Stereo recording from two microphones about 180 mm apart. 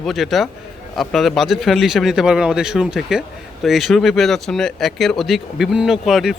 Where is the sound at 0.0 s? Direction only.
Centre (ahead or behind).